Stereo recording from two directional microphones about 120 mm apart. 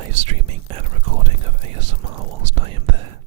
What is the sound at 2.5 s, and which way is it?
Whispering, 50° right (ahead or behind).